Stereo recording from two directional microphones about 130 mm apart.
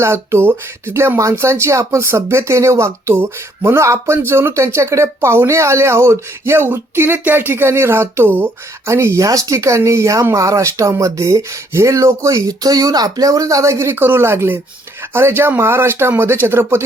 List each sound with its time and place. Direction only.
0.0 s speech: 20° right (ahead or behind)